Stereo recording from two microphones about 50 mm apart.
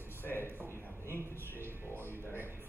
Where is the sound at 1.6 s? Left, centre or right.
Right.